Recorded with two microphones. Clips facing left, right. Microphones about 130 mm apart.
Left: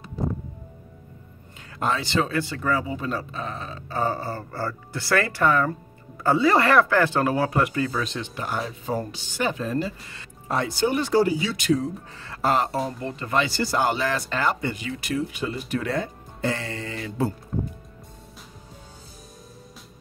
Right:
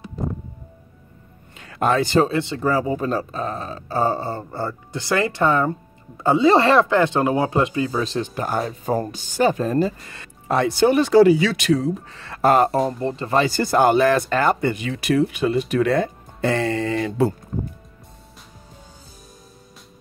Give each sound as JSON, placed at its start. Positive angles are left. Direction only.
{"t": 1.6, "sound": "speech", "side_deg": -65}
{"t": 2.1, "sound": "speech", "side_deg": -25}
{"t": 2.7, "sound": "speech", "side_deg": -40}
{"t": 8.0, "sound": "speech", "side_deg": -35}
{"t": 10.0, "sound": "speech", "side_deg": -55}
{"t": 13.0, "sound": "speech", "side_deg": -30}